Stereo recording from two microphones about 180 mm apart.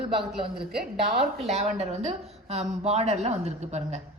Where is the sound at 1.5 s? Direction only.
35° right (ahead or behind).